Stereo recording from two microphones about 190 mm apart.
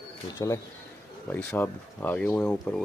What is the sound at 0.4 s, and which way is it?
Speech, 15° left (ahead or behind).